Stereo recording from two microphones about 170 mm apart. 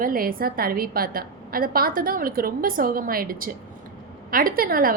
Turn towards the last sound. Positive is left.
turn(degrees=-60)  # may be behind; listen again after turning